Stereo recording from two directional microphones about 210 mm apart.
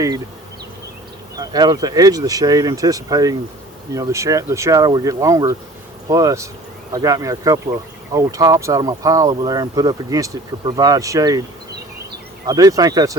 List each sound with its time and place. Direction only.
1.4 s speech: 20° right (ahead or behind)
12.5 s speech: 15° right (ahead or behind)